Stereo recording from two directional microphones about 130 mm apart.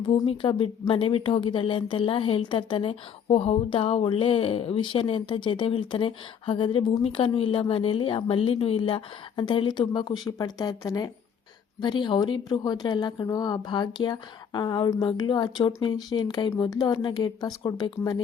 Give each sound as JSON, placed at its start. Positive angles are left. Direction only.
{"t": 0.0, "sound": "a woman's voice", "side_deg": 40}